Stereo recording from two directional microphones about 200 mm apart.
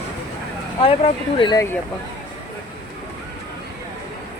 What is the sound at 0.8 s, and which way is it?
Speech, 25° left (ahead or behind).